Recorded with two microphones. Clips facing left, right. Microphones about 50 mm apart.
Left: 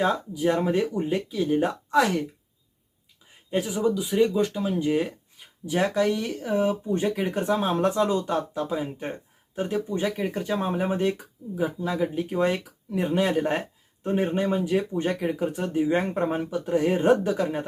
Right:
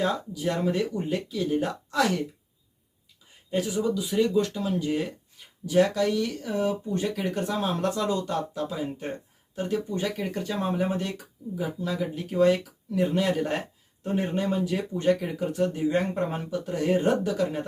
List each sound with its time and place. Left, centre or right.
0.0 s speech: left
3.5 s speech: centre